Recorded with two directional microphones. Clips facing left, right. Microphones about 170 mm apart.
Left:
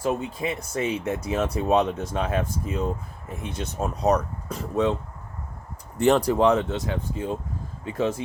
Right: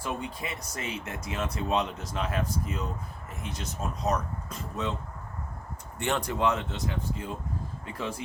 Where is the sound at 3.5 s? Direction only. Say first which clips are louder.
Left 6 dB; 30° left (ahead or behind).